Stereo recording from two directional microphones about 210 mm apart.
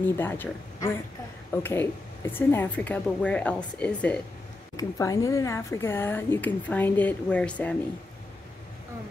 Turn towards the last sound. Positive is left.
turn(degrees=5)  # may be behind; listen again after turning